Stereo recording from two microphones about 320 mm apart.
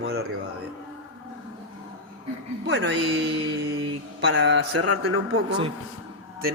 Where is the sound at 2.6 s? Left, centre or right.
Right.